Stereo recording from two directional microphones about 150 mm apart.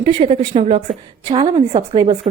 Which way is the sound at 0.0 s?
40° right (ahead or behind).